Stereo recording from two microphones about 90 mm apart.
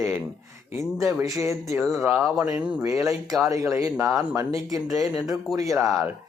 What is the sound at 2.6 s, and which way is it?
Speech, 15° right (ahead or behind).